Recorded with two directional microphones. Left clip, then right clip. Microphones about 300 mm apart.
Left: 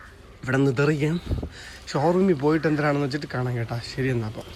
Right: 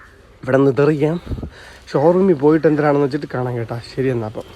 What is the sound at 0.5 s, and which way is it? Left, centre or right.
Speech, centre.